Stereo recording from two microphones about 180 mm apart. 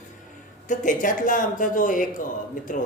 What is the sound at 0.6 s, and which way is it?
A man's voice, 45° left (ahead or behind).